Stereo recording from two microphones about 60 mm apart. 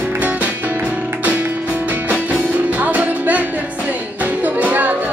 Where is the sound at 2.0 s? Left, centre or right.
Right.